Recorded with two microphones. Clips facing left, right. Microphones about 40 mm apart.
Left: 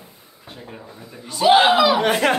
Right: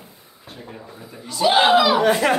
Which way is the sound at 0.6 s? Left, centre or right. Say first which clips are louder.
Right 1 dB; centre.